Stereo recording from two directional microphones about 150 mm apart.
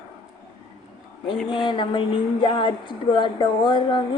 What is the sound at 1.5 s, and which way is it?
Speech, 30° left (ahead or behind).